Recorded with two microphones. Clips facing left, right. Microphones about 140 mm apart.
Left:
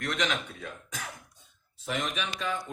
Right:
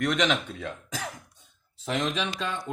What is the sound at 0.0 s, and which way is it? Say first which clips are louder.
Speech: right 6 dB; 90° right.